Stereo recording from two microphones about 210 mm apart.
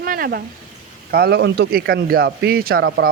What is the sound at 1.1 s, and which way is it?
A man's voice, 50° right (ahead or behind).